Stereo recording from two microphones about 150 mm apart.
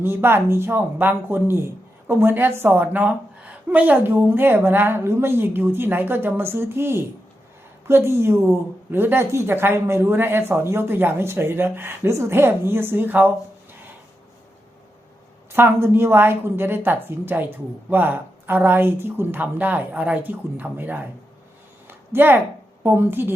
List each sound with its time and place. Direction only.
0.0 s speech: 15° right (ahead or behind)
15.5 s speech: 15° right (ahead or behind)
21.8 s a sound: 15° right (ahead or behind)
22.8 s speech: 15° right (ahead or behind)